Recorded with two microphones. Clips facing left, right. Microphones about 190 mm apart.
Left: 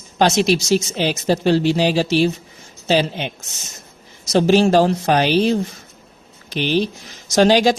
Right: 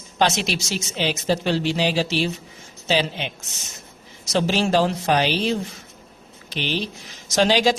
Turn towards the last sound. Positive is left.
turn(degrees=45)  # may be behind; listen again after turning